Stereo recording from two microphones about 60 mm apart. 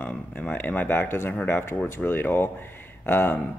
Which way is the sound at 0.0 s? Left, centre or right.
Centre.